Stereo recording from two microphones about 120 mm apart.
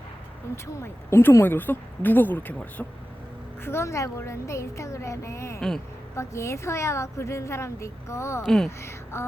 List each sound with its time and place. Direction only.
0.5 s a woman's voice: 20° left (ahead or behind)
5.5 s speech: 5° left (ahead or behind)
6.1 s a woman's voice: 25° left (ahead or behind)
8.4 s speech: 5° left (ahead or behind)
8.8 s speech: 20° left (ahead or behind)